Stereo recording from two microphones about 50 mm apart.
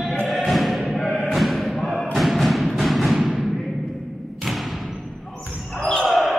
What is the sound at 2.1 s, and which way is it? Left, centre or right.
Music, centre.